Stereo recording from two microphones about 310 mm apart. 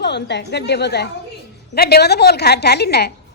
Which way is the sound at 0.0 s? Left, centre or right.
Left.